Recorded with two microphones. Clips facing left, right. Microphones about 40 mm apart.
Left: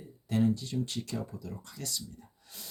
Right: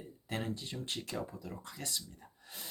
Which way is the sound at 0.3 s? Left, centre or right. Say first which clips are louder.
Left 10 dB; right.